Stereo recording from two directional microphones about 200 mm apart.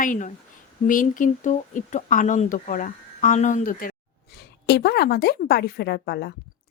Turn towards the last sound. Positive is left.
turn(degrees=55)  # may be behind; listen again after turning